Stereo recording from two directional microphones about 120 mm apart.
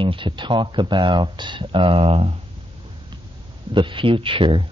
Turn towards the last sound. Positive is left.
turn(degrees=-45)  # may be behind; listen again after turning